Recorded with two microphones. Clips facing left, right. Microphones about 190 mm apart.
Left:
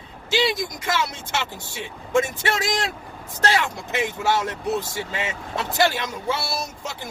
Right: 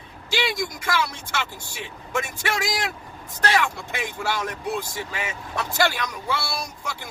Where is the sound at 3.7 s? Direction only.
20° left (ahead or behind).